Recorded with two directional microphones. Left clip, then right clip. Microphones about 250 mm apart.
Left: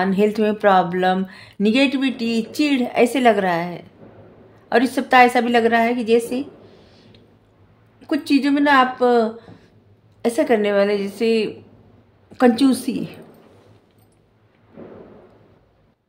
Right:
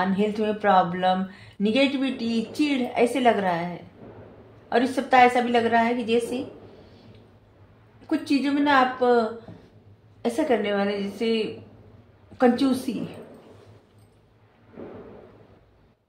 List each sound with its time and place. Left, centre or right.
0.0 s speech: left
8.1 s speech: left
10.2 s speech: left